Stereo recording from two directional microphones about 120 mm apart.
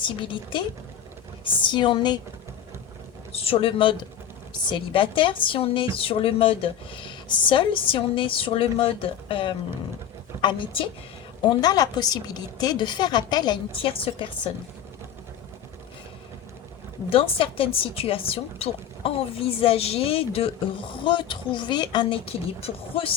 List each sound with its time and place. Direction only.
0.0 s speech: 45° left (ahead or behind)
3.3 s speech: 50° left (ahead or behind)
11.4 s a woman's voice: 35° left (ahead or behind)
17.1 s speech: 50° left (ahead or behind)
22.3 s speech: 50° left (ahead or behind)